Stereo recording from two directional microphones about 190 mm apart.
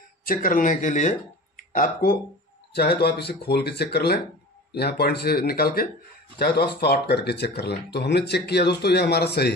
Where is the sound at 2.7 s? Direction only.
60° left (ahead or behind).